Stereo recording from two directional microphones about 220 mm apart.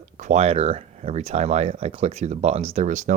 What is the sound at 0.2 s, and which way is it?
Speech, 30° right (ahead or behind).